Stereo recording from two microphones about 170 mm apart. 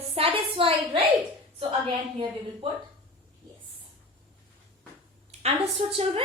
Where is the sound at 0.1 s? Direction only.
35° right (ahead or behind).